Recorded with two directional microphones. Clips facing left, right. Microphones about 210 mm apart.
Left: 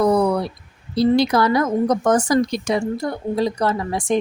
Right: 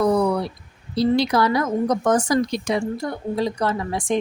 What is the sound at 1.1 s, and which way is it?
A woman's voice, 50° left (ahead or behind).